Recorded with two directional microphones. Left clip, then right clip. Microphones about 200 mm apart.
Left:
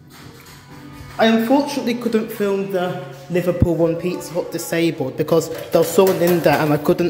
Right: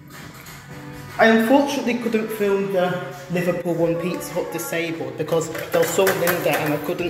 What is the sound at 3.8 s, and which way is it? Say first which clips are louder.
Speech: left 2 dB; 30° left (ahead or behind).